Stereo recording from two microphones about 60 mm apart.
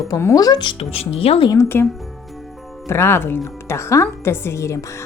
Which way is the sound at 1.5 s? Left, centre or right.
Left.